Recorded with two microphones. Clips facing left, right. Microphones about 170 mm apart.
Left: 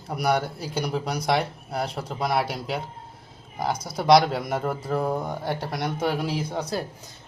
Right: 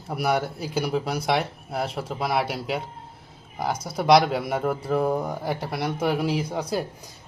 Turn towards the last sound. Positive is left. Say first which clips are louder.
# right 2 dB
turn(degrees=-10)  # may be behind; listen again after turning